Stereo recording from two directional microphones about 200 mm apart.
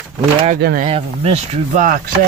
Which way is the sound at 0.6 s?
45° right (ahead or behind).